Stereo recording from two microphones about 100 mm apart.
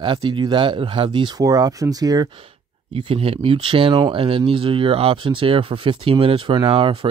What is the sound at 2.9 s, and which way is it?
Speech, 65° right (ahead or behind).